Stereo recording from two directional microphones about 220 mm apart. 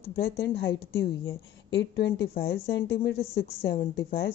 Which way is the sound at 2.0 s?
50° left (ahead or behind).